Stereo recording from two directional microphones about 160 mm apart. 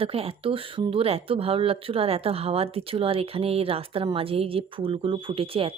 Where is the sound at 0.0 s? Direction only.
35° right (ahead or behind).